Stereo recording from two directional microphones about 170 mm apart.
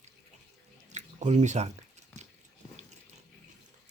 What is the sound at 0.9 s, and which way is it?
Drip, 45° right (ahead or behind).